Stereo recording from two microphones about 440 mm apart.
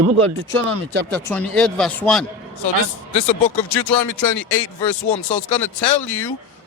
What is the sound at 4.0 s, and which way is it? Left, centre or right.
A man's voice, left.